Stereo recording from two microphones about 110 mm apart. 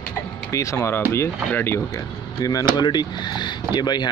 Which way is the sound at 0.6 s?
25° left (ahead or behind).